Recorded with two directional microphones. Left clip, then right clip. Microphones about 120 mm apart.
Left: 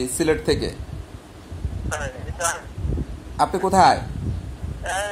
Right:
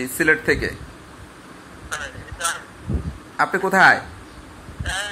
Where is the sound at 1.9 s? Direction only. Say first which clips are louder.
Left 1 dB; 55° left (ahead or behind).